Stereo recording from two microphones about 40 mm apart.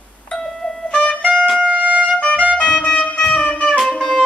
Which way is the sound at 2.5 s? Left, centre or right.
Left.